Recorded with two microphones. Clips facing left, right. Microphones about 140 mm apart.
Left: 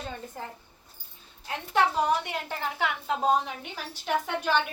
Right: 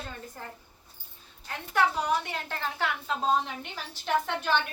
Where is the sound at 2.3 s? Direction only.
15° left (ahead or behind).